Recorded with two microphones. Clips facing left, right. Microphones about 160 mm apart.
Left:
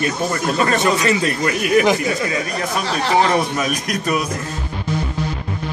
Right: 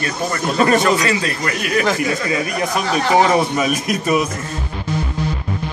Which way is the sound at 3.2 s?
5° right (ahead or behind).